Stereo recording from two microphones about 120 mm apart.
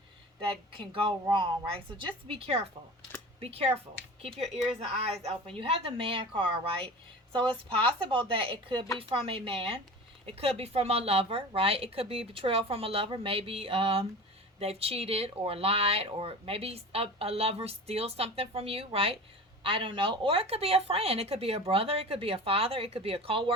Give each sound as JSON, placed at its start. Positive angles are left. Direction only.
{"t": 0.8, "sound": "speech", "side_deg": -40}
{"t": 4.8, "sound": "speech", "side_deg": -60}